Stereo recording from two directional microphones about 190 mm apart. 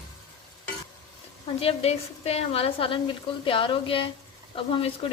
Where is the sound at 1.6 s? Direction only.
30° left (ahead or behind).